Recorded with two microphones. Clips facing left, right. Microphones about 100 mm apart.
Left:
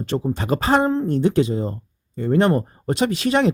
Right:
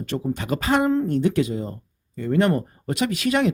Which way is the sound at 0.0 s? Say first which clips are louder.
Left 3 dB; 30° left (ahead or behind).